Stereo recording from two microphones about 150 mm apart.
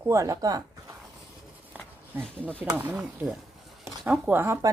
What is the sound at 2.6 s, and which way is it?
Speech, 15° right (ahead or behind).